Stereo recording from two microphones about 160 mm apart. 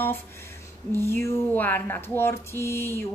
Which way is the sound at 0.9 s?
15° left (ahead or behind).